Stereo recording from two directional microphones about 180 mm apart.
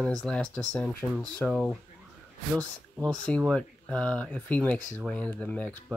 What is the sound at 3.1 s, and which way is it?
Speech, 5° left (ahead or behind).